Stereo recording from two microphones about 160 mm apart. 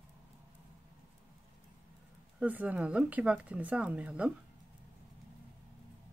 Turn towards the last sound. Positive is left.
turn(degrees=-5)  # may be behind; listen again after turning